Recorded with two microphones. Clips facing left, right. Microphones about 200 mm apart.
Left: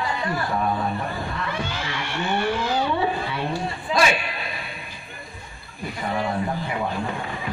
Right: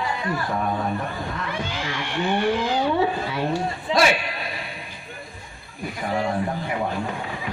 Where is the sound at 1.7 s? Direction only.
15° right (ahead or behind).